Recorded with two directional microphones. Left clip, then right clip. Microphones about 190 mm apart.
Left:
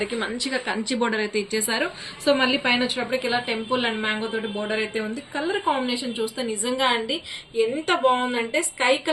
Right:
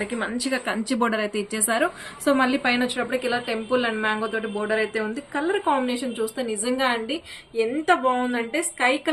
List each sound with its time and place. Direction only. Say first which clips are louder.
0.2 s a woman's voice: even; 65° right (ahead or behind)